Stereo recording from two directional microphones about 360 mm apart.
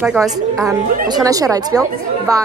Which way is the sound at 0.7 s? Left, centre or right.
Centre.